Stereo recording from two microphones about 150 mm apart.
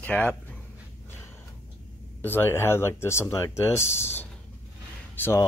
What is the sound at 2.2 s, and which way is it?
Speech, 15° left (ahead or behind).